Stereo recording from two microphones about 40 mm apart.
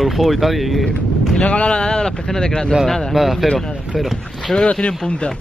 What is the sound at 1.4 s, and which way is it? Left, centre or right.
Speech, left.